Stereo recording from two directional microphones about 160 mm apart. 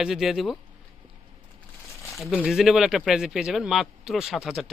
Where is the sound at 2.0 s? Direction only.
Centre (ahead or behind).